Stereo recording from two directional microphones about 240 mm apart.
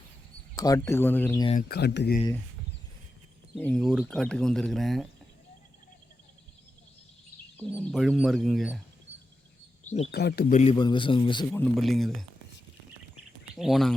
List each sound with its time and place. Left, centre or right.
0.5 s speech: centre
1.6 s speech: left
3.5 s speech: centre
7.5 s speech: centre
9.8 s bird: left
10.1 s speech: left
10.5 s a man's voice: left
11.6 s speech: centre
13.6 s speech: centre